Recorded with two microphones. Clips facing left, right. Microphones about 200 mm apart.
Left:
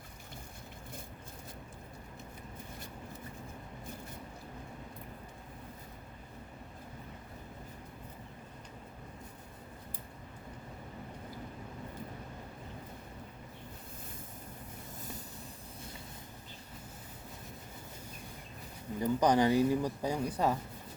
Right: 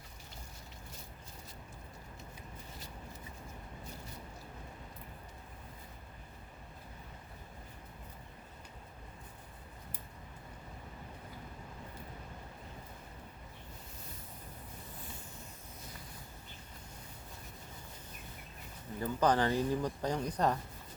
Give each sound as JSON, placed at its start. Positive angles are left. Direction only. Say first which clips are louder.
{"t": 18.9, "sound": "speech", "louder": "left 3 dB", "side_deg": 15}